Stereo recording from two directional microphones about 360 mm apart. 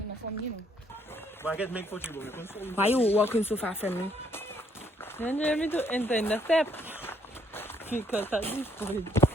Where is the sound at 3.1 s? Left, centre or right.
Centre.